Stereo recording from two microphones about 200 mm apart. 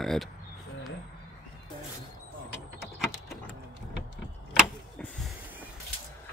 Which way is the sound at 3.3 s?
55° left (ahead or behind).